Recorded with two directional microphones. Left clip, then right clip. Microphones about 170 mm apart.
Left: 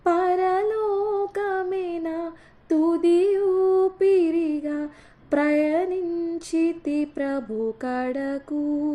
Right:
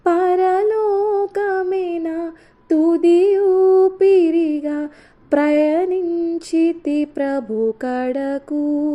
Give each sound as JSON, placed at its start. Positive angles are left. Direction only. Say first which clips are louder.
{"t": 0.0, "sound": "humming", "louder": "right 5 dB", "side_deg": -30}
{"t": 5.3, "sound": "female singing", "louder": "right 6 dB", "side_deg": -30}